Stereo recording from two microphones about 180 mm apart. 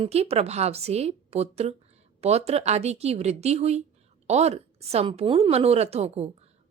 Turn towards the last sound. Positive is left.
turn(degrees=-35)  # may be behind; listen again after turning